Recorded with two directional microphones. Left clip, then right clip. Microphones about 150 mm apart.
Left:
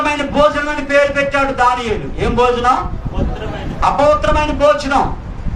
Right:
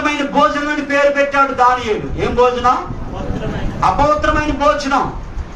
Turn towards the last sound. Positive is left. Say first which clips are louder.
# left 2 dB
turn(degrees=25)  # may be behind; listen again after turning